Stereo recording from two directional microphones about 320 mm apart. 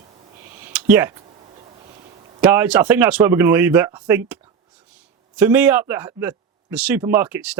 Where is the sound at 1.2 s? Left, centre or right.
Centre.